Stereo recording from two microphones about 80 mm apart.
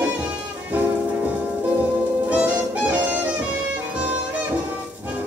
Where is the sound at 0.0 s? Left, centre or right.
Centre.